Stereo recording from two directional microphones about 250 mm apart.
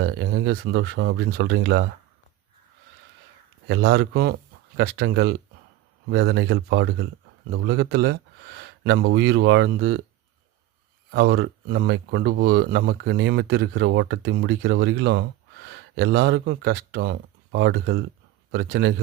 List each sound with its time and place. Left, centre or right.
0.0 s speech: right
3.7 s speech: right
11.1 s speech: right